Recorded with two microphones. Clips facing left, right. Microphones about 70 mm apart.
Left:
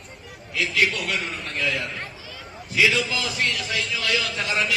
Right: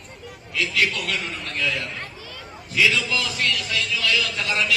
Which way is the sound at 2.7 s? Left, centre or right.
Centre.